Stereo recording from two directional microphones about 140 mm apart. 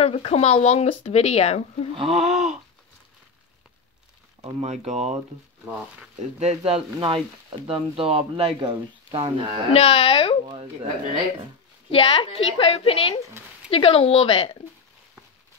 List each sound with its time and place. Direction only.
0.0 s speech: 45° left (ahead or behind)
2.0 s speech: 50° right (ahead or behind)
4.6 s speech: 55° right (ahead or behind)
6.4 s speech: 50° right (ahead or behind)
9.7 s speech: 45° left (ahead or behind)
11.9 s speech: 40° left (ahead or behind)